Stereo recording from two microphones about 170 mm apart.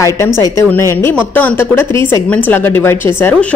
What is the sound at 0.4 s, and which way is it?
A woman's voice, 15° left (ahead or behind).